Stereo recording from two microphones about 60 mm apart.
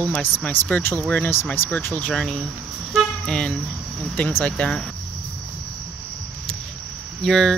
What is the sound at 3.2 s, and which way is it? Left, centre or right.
Cricket, centre.